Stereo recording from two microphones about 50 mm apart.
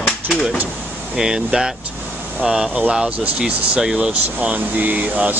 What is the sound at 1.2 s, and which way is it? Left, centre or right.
Speech, centre.